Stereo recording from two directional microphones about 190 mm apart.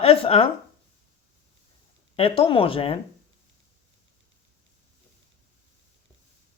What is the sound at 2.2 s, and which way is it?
Speech, 30° left (ahead or behind).